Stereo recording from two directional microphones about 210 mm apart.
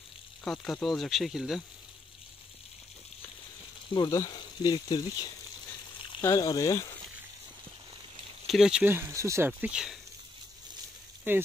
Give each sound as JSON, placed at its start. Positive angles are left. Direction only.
{"t": 0.4, "sound": "speech", "side_deg": 5}
{"t": 3.9, "sound": "speech", "side_deg": 20}
{"t": 6.2, "sound": "speech", "side_deg": 15}
{"t": 8.5, "sound": "speech", "side_deg": 0}
{"t": 11.3, "sound": "speech", "side_deg": -10}